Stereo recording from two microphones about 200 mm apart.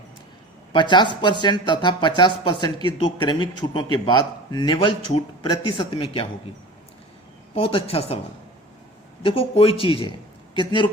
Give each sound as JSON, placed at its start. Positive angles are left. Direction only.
{"t": 0.7, "sound": "speech", "side_deg": 25}
{"t": 7.5, "sound": "speech", "side_deg": 30}
{"t": 9.2, "sound": "speech", "side_deg": 30}